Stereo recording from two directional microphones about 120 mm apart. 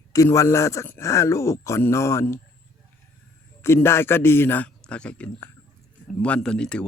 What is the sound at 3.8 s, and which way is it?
Speech, 20° left (ahead or behind).